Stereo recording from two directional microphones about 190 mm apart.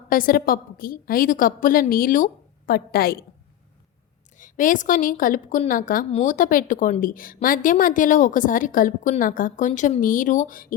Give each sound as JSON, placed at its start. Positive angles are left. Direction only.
{"t": 0.1, "sound": "a woman's voice", "side_deg": 50}
{"t": 4.4, "sound": "a woman's voice", "side_deg": 45}